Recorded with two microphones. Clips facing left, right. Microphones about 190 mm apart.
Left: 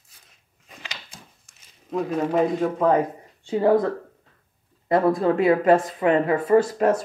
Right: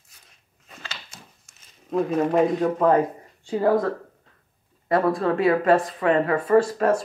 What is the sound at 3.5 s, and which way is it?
Speech, 20° left (ahead or behind).